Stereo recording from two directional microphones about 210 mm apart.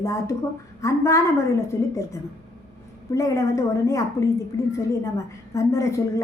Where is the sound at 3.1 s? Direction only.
15° left (ahead or behind).